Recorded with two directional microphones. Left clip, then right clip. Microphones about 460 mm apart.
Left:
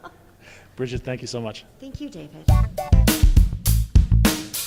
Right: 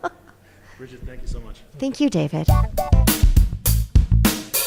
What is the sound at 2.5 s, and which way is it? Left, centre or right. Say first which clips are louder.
Music: right 4 dB; centre.